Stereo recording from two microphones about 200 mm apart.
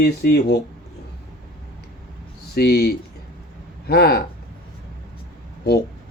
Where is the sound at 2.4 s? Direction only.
55° left (ahead or behind).